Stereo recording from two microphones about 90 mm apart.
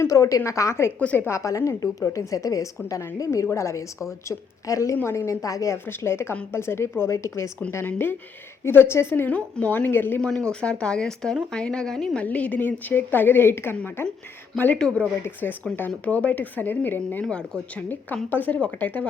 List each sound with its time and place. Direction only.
0.0 s a woman's voice: 35° left (ahead or behind)
0.9 s speech: 15° left (ahead or behind)
1.3 s a woman's voice: 35° left (ahead or behind)
5.7 s a woman's voice: 25° left (ahead or behind)
10.2 s a woman's voice: 10° left (ahead or behind); by 14.1 s 25° left (ahead or behind)
14.8 s speech: 10° left (ahead or behind)
15.2 s a woman's voice: 20° left (ahead or behind)